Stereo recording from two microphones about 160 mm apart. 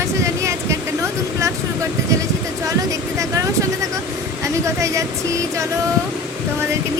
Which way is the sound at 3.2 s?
20° right (ahead or behind).